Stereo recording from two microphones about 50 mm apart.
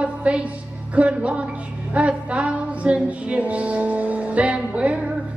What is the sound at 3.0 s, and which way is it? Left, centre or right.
Music, right.